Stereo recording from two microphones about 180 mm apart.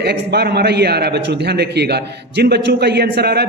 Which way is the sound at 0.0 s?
65° right (ahead or behind).